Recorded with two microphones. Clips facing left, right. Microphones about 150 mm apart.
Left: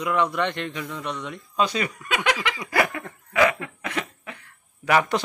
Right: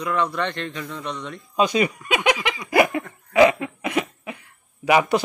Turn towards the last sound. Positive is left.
turn(degrees=-10)  # may be behind; listen again after turning